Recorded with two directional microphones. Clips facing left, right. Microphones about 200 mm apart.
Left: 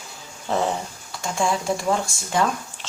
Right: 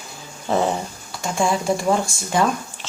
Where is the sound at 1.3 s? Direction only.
10° right (ahead or behind).